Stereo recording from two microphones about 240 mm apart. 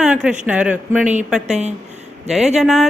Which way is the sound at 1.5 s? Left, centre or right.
Right.